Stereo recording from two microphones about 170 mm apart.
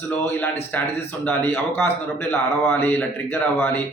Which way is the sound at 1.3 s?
10° left (ahead or behind).